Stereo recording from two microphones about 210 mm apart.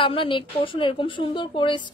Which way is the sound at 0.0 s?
25° left (ahead or behind).